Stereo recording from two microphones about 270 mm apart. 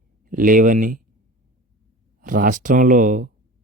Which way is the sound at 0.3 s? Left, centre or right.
Right.